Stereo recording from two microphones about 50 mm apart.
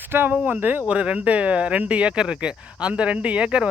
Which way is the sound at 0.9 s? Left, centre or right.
Right.